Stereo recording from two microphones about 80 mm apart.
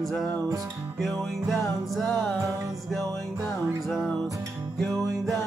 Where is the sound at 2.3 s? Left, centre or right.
Right.